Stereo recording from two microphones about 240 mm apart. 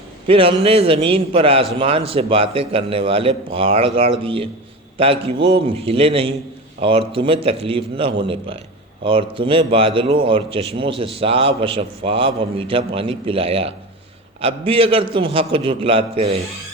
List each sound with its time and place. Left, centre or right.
0.3 s a man's voice: right